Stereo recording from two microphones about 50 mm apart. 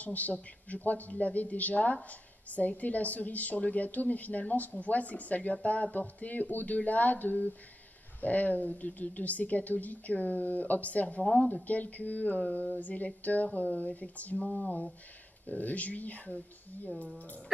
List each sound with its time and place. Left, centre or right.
0.0 s a woman's voice: left
14.4 s a sound: centre
15.4 s a woman's voice: left